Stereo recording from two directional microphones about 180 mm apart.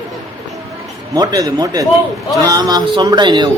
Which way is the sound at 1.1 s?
20° right (ahead or behind).